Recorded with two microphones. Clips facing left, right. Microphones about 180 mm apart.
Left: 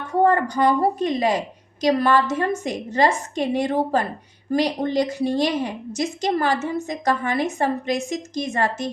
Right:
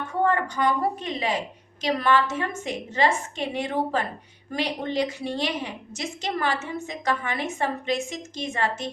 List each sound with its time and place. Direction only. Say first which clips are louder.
0.1 s a woman's voice: left 6 dB; 40° left (ahead or behind)